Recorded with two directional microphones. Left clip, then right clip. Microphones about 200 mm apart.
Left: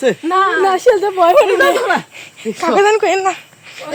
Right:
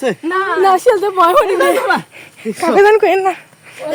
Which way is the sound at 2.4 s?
25° right (ahead or behind).